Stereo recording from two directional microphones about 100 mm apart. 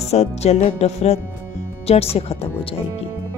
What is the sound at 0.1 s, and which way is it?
Music, 90° left.